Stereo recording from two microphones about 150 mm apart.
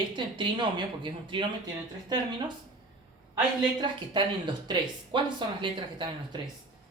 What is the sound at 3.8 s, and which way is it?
Speech, 30° right (ahead or behind).